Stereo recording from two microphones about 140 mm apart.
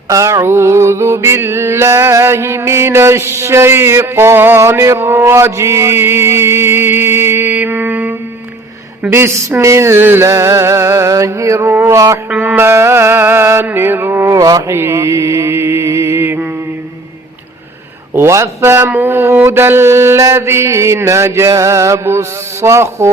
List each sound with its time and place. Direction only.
0.1 s mantra: 25° right (ahead or behind)
12.3 s mantra: 10° right (ahead or behind)
18.1 s speech: 20° right (ahead or behind)
19.5 s mantra: 15° right (ahead or behind)